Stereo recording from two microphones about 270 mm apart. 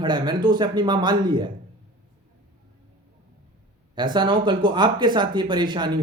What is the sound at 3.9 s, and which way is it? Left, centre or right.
Speech, centre.